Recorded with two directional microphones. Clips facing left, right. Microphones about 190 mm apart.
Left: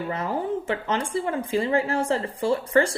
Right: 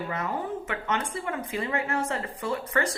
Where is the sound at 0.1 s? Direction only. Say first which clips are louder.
Left 6 dB; 30° left (ahead or behind).